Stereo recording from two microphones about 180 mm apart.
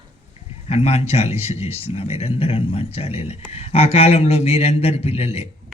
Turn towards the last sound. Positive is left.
turn(degrees=35)  # may be behind; listen again after turning